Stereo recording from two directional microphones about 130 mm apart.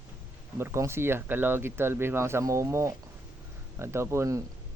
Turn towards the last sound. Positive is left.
turn(degrees=-20)  # may be behind; listen again after turning